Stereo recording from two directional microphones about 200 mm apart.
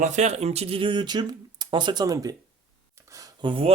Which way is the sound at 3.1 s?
20° right (ahead or behind).